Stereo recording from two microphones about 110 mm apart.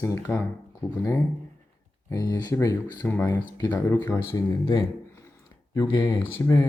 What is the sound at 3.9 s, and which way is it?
Speech, 20° left (ahead or behind).